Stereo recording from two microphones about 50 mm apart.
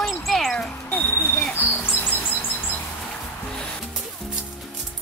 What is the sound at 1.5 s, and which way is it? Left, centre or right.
Chirp, left.